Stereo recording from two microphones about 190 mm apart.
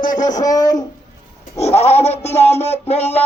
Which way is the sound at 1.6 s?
35° left (ahead or behind).